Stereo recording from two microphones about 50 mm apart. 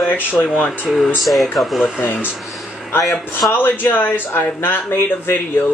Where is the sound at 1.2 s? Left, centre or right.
Centre.